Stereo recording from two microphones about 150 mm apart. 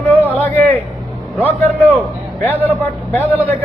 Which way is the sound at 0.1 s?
10° left (ahead or behind).